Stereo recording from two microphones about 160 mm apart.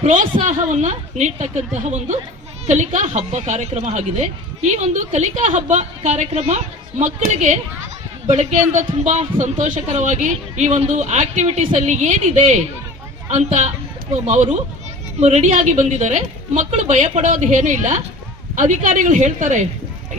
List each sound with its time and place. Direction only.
0.0 s speech: 50° right (ahead or behind)